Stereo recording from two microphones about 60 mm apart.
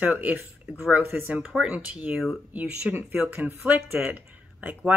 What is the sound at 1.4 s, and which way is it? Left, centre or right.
Speech, centre.